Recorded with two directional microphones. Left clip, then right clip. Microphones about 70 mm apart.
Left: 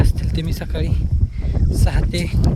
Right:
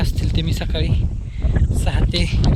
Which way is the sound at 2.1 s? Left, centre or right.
Centre.